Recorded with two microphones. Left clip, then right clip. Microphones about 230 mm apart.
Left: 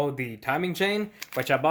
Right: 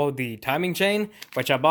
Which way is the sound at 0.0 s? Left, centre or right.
Right.